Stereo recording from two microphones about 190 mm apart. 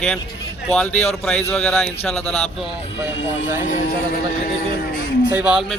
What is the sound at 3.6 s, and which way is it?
Speech, 40° left (ahead or behind).